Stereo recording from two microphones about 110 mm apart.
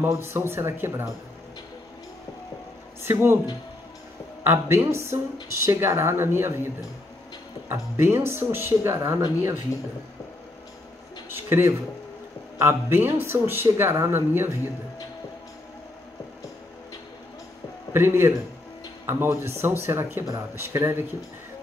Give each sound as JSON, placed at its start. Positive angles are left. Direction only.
{"t": 0.0, "sound": "speech", "side_deg": -25}
{"t": 3.0, "sound": "speech", "side_deg": -20}
{"t": 4.5, "sound": "speech", "side_deg": -25}
{"t": 11.2, "sound": "a sound", "side_deg": -20}
{"t": 12.5, "sound": "speech", "side_deg": -20}
{"t": 17.9, "sound": "speech", "side_deg": -20}